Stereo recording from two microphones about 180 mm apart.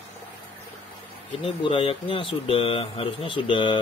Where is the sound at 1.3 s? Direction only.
30° left (ahead or behind).